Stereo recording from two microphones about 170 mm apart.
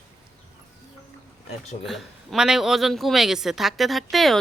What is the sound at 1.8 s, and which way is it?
A man's voice, centre (ahead or behind).